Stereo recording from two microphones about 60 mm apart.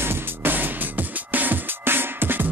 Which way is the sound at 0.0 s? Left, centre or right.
Right.